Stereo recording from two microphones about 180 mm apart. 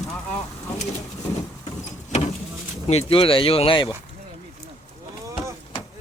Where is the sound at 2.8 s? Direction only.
35° left (ahead or behind).